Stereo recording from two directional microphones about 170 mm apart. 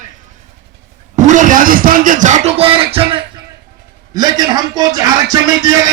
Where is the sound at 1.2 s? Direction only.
45° right (ahead or behind); by 5.8 s 20° right (ahead or behind).